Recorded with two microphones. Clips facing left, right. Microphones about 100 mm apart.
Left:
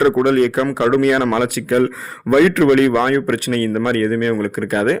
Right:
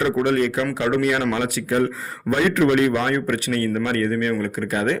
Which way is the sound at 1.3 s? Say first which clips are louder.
Left 6 dB; 70° left (ahead or behind).